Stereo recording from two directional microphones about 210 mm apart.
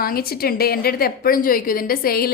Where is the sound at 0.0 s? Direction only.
45° left (ahead or behind).